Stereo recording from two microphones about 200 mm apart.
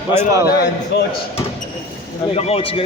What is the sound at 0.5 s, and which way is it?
Speech, 55° left (ahead or behind).